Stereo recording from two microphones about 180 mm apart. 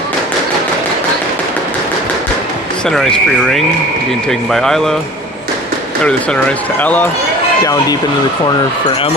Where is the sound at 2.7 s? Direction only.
5° left (ahead or behind).